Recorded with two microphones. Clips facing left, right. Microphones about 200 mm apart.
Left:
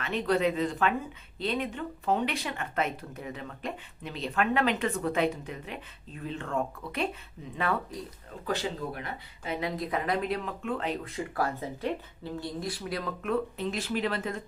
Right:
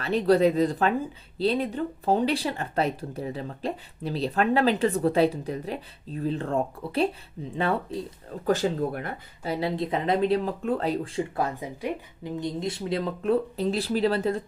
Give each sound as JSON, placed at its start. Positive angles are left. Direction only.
{"t": 0.0, "sound": "speech", "side_deg": -35}
{"t": 8.4, "sound": "speech", "side_deg": -45}
{"t": 9.5, "sound": "speech", "side_deg": -30}